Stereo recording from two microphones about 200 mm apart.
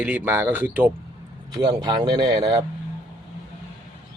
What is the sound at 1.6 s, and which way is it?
Speech, 20° right (ahead or behind).